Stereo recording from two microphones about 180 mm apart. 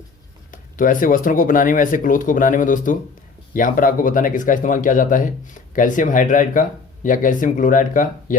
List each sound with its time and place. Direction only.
0.5 s speech: 45° left (ahead or behind)